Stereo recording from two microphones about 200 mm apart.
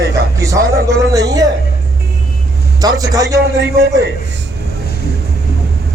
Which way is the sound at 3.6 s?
60° right (ahead or behind).